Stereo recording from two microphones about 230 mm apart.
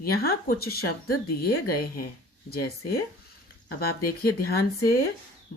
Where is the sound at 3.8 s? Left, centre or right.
Left.